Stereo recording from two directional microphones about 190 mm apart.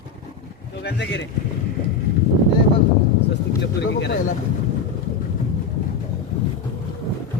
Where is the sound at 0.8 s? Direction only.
65° left (ahead or behind).